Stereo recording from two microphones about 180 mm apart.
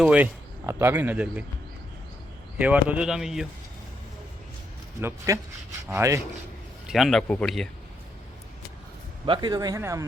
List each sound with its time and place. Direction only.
0.0 s speech: 5° right (ahead or behind)
2.6 s speech: 5° right (ahead or behind)
4.9 s speech: 15° right (ahead or behind)
6.8 s speech: centre (ahead or behind)
9.2 s speech: 25° right (ahead or behind)